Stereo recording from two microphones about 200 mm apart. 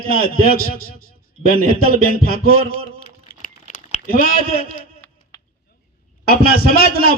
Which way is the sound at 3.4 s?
40° left (ahead or behind).